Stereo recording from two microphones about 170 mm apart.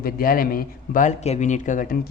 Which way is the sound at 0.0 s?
60° left (ahead or behind).